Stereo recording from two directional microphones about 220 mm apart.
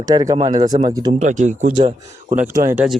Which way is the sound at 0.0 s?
15° right (ahead or behind).